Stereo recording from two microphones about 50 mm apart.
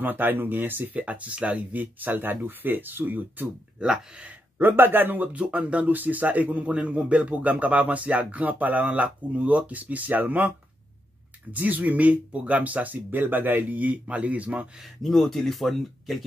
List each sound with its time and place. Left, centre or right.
0.0 s speech: right
1.0 s speech: right
4.6 s speech: right
11.5 s speech: right
15.0 s speech: centre